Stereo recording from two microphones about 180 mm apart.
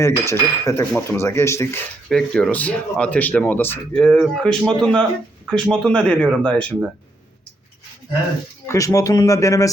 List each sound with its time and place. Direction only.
0.0 s speech: 15° left (ahead or behind)
2.0 s speech: 5° left (ahead or behind)
8.6 s speech: 15° left (ahead or behind)